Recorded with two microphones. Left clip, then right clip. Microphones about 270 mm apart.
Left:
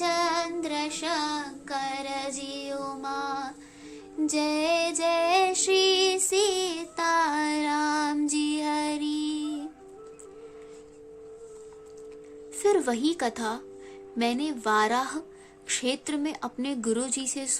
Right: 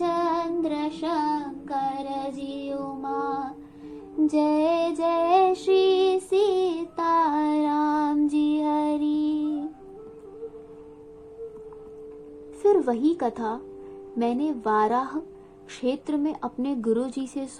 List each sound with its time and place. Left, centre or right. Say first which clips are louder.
0.0 s child singing: right 1 dB; left
4.3 s child singing: right 3 dB; centre
12.6 s a woman's voice: right 3 dB; left